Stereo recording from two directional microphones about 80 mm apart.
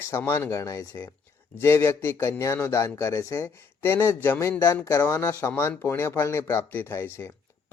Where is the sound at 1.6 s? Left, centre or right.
Left.